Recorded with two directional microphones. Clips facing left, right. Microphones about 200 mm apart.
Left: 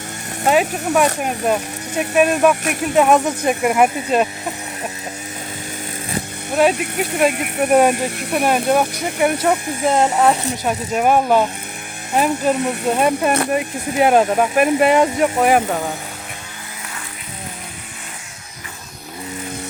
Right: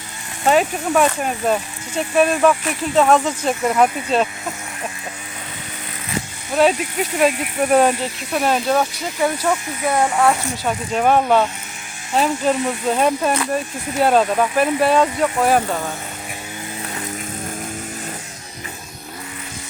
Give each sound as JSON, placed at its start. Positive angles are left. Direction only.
{"t": 0.4, "sound": "speech", "side_deg": 5}
{"t": 6.7, "sound": "speech", "side_deg": 60}
{"t": 7.6, "sound": "speech", "side_deg": 10}